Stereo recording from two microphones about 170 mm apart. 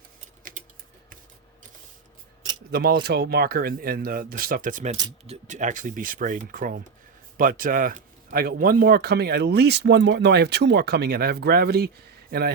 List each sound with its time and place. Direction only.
2.7 s speech: 60° right (ahead or behind); by 4.9 s 45° right (ahead or behind)
4.9 s speech: 30° right (ahead or behind); by 11.9 s 70° right (ahead or behind)